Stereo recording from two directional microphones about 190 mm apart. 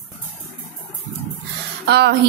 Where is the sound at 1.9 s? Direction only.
60° right (ahead or behind).